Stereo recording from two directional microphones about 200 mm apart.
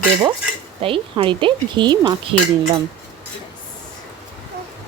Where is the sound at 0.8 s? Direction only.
25° right (ahead or behind).